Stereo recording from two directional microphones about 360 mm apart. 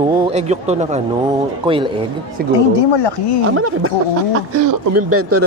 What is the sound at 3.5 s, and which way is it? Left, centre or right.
Speech, right.